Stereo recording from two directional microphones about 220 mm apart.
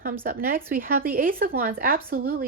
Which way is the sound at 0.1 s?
40° right (ahead or behind).